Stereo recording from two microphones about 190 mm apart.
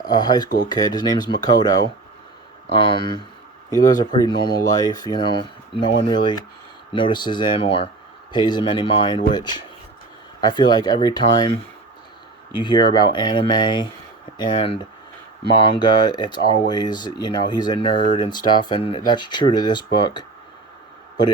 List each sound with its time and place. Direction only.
0.0 s speech: 20° left (ahead or behind)
2.8 s speech: 25° left (ahead or behind)